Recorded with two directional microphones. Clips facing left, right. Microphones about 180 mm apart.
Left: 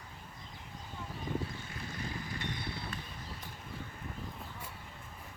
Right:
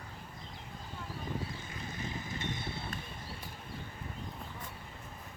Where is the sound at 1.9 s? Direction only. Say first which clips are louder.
Right 1 dB; 20° right (ahead or behind).